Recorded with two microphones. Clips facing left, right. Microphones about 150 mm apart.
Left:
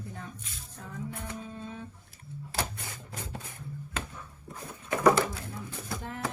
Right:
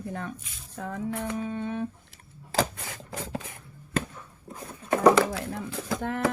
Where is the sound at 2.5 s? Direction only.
90° right.